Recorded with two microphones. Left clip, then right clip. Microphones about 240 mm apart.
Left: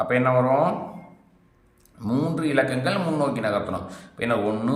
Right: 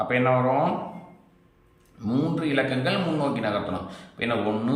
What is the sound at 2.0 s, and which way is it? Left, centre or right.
A man's voice, centre.